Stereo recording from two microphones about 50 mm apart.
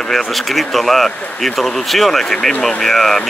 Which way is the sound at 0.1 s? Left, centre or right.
Centre.